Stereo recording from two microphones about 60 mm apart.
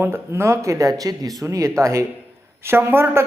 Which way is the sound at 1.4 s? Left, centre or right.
Right.